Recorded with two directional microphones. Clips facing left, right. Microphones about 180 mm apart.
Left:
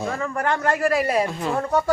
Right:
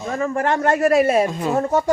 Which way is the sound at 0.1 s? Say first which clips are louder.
Right 8 dB; 25° right (ahead or behind).